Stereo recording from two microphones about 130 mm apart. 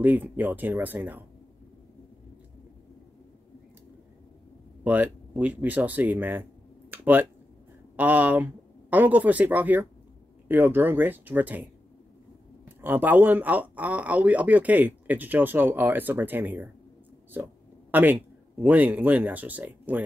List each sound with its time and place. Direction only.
0.0 s speech: 15° right (ahead or behind)
4.8 s speech: 15° right (ahead or behind)
6.9 s a sound: 15° right (ahead or behind)
7.9 s speech: 15° right (ahead or behind)
12.6 s speech: 15° right (ahead or behind)
17.9 s speech: 15° right (ahead or behind)